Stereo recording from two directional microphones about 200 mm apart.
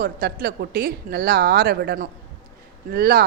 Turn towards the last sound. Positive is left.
turn(degrees=-50)  # may be behind; listen again after turning